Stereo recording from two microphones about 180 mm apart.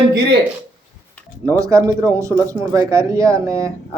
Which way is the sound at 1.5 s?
15° right (ahead or behind).